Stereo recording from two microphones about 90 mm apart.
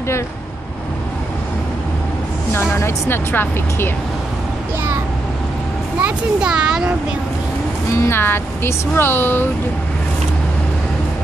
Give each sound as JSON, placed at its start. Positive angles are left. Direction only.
{"t": 2.5, "sound": "speech", "side_deg": 25}
{"t": 6.0, "sound": "speech", "side_deg": -10}
{"t": 8.0, "sound": "speech", "side_deg": 25}